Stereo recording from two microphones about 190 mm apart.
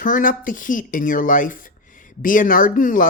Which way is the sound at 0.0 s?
45° left (ahead or behind).